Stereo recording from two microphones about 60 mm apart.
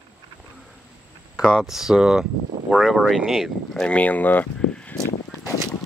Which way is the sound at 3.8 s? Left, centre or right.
Left.